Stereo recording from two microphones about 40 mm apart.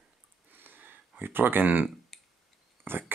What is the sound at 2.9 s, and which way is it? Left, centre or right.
Speech, right.